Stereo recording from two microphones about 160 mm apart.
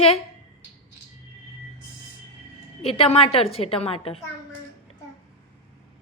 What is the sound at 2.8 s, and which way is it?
A woman's voice, 35° left (ahead or behind).